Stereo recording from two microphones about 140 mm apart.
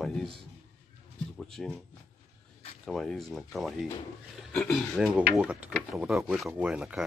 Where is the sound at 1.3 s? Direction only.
5° left (ahead or behind).